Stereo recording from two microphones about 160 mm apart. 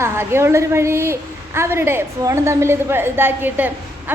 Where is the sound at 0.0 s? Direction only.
15° right (ahead or behind).